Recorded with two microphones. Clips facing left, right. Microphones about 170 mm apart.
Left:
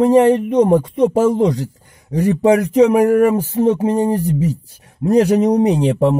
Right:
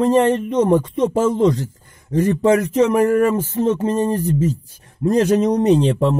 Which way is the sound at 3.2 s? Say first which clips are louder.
Left 3 dB; 15° left (ahead or behind).